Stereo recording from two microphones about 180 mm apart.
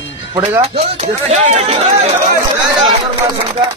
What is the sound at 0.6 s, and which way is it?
Speech, 35° right (ahead or behind).